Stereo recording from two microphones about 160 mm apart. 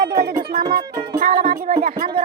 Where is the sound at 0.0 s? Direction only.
65° right (ahead or behind).